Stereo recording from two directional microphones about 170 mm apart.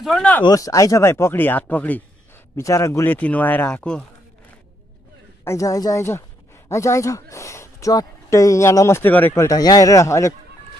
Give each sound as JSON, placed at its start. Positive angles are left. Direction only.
{"t": 0.0, "sound": "speech", "side_deg": 5}
{"t": 0.5, "sound": "speech", "side_deg": 20}
{"t": 5.4, "sound": "speech", "side_deg": 15}